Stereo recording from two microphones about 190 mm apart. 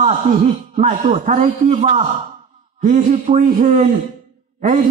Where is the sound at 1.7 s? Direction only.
30° right (ahead or behind).